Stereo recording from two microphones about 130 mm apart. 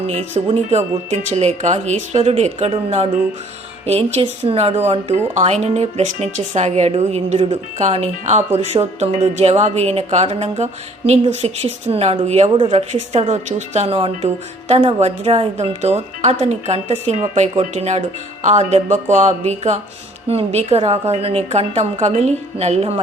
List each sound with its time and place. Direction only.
0.1 s speech: 55° right (ahead or behind)